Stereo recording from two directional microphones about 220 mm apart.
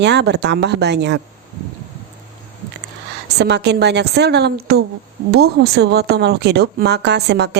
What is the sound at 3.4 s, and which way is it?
A woman's voice, 50° right (ahead or behind).